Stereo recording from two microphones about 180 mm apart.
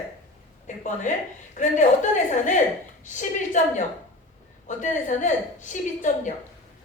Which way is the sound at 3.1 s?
45° left (ahead or behind).